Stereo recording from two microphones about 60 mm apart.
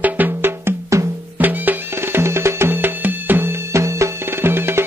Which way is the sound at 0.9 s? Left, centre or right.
Right.